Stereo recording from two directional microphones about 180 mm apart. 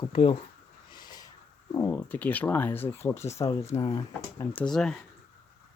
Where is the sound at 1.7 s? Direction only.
15° left (ahead or behind).